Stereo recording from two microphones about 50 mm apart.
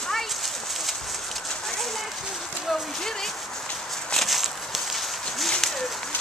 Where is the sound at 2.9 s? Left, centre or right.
Centre.